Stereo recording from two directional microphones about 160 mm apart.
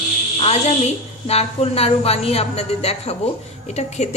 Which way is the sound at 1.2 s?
40° left (ahead or behind).